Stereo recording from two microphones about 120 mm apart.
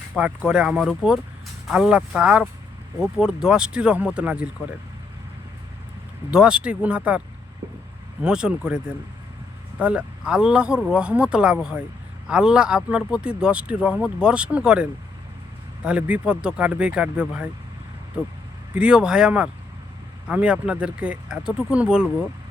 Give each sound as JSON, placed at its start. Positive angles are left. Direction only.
{"t": 0.2, "sound": "speech", "side_deg": -10}
{"t": 6.3, "sound": "speech", "side_deg": -5}
{"t": 8.2, "sound": "speech", "side_deg": -5}
{"t": 18.7, "sound": "speech", "side_deg": -10}